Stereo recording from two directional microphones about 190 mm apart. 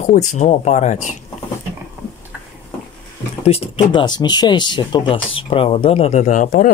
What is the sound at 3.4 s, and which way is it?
Speech, 30° left (ahead or behind).